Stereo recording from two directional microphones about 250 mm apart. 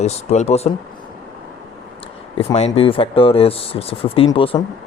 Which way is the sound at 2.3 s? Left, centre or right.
Left.